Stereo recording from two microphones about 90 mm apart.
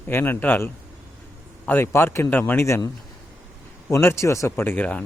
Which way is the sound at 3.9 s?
30° left (ahead or behind).